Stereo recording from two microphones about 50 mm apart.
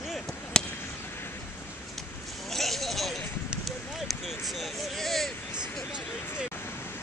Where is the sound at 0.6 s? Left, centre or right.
Centre.